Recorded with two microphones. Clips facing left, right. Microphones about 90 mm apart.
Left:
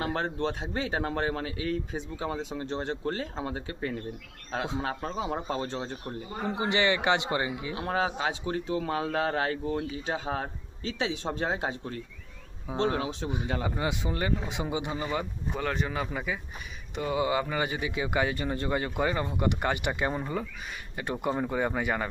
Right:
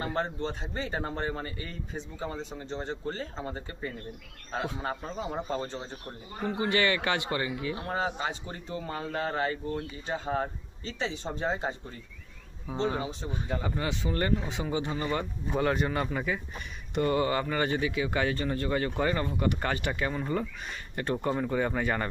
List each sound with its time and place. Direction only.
0.0 s a man's voice: 70° left (ahead or behind)
6.4 s a man's voice: 25° left (ahead or behind)
7.8 s a man's voice: 90° left
10.9 s a man's voice: 65° left (ahead or behind); by 13.3 s 90° left
13.6 s speech: 15° left (ahead or behind)
15.5 s speech: 5° right (ahead or behind); by 20.2 s 20° left (ahead or behind)
20.2 s speech: 5° left (ahead or behind)